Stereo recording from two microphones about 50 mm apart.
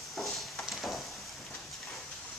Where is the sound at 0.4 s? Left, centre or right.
Centre.